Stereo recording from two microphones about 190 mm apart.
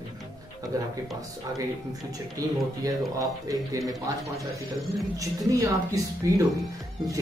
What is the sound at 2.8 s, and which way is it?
Speech, 20° right (ahead or behind).